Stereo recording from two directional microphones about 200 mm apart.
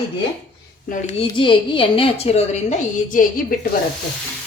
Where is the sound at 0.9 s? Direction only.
35° left (ahead or behind).